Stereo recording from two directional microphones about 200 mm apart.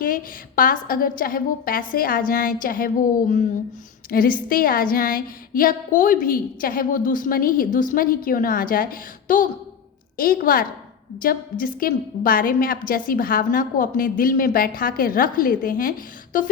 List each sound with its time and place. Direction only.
0.0 s a woman's voice: 45° left (ahead or behind)